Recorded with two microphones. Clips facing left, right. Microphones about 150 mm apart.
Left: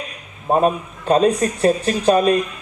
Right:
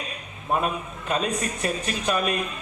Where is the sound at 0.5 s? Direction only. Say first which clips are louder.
Left 8 dB; 35° left (ahead or behind).